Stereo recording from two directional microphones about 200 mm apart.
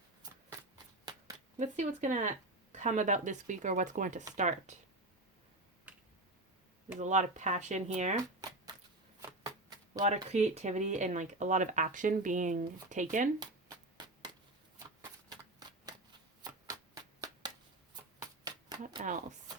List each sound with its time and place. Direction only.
1.5 s speech: 40° right (ahead or behind)
7.0 s speech: 35° right (ahead or behind)
8.4 s shuffling cards: 20° right (ahead or behind)
10.3 s speech: 35° right (ahead or behind)
13.4 s hands: 20° right (ahead or behind)
16.4 s shuffling cards: 20° right (ahead or behind)